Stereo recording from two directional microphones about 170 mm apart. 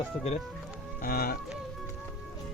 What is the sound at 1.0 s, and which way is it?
Speech, 60° left (ahead or behind).